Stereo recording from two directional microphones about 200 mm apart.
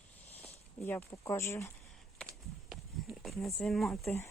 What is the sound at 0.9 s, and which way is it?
Speech, 15° left (ahead or behind).